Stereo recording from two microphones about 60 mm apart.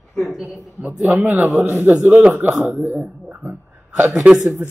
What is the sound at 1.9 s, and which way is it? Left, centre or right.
Speech, right.